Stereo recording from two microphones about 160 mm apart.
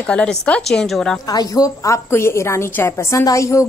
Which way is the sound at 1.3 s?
20° left (ahead or behind).